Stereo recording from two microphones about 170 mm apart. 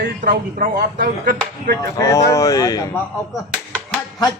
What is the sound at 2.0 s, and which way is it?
A man's voice, 20° left (ahead or behind).